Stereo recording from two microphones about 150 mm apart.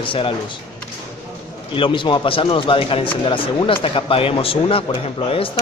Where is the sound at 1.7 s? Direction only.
35° left (ahead or behind).